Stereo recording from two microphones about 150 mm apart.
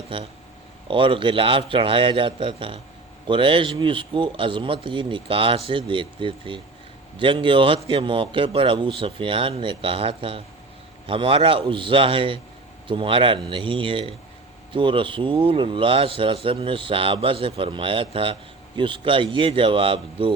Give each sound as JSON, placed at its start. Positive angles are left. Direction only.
{"t": 0.9, "sound": "speech", "side_deg": -35}